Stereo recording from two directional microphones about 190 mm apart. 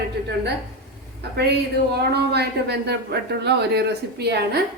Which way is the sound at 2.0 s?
60° right (ahead or behind).